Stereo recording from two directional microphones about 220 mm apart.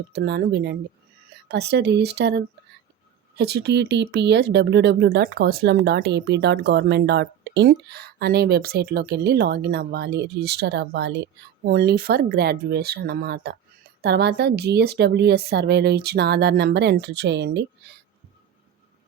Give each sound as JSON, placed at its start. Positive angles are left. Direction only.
{"t": 0.1, "sound": "speech", "side_deg": -50}